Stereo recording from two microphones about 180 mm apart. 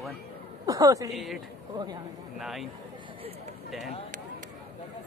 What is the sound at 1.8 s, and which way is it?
Speech, 20° right (ahead or behind).